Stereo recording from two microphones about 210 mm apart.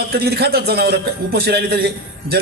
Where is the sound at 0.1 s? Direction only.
50° right (ahead or behind).